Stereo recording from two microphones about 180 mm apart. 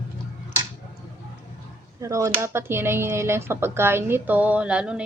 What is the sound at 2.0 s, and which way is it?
Speech, 15° right (ahead or behind).